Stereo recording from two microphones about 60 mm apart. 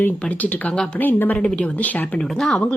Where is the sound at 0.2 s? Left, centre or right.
Left.